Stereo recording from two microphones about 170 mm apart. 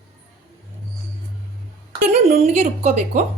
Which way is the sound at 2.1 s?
40° right (ahead or behind).